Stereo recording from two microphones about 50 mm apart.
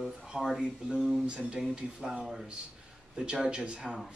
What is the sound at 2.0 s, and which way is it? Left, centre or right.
Speech, centre.